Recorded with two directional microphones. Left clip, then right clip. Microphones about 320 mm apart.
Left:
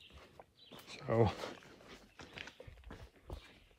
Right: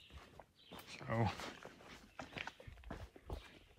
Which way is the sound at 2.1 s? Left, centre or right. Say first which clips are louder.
Right 3 dB; centre.